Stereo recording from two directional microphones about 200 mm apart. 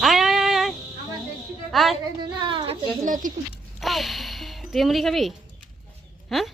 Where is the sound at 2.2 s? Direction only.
25° right (ahead or behind).